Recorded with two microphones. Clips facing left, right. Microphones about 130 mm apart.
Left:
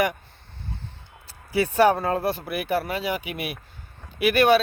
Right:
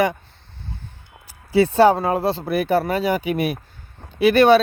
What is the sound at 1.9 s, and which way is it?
Speech, 20° right (ahead or behind).